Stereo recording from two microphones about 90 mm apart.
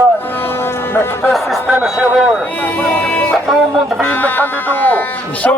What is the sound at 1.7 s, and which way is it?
Speech, 15° right (ahead or behind).